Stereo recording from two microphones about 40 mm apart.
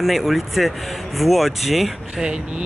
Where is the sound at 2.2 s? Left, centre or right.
Right.